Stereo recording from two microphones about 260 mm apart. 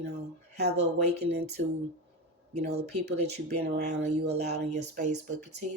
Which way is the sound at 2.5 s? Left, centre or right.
Right.